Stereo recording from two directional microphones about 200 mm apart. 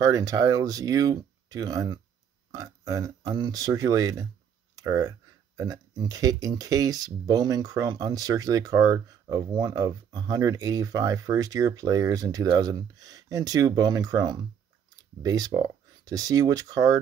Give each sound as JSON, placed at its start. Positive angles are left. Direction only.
{"t": 0.0, "sound": "speech", "side_deg": -15}